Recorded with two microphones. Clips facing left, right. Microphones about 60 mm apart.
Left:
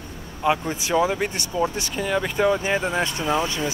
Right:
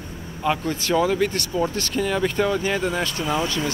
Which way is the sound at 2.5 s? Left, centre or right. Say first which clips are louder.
Left 1 dB; left.